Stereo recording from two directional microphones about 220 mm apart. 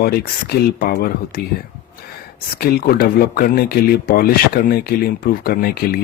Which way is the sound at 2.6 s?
45° left (ahead or behind).